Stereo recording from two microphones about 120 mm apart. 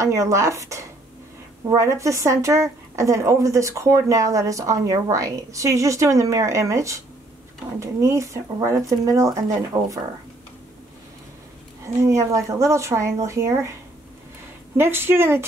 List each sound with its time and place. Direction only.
0.0 s a woman's voice: 25° right (ahead or behind)
11.8 s a woman's voice: 25° right (ahead or behind)
14.8 s a woman's voice: 20° right (ahead or behind)